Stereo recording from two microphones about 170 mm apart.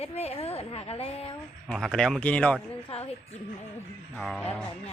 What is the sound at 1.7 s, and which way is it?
Speech, 5° left (ahead or behind).